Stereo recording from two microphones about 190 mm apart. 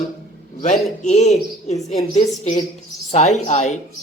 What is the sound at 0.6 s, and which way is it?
Speech, 35° left (ahead or behind).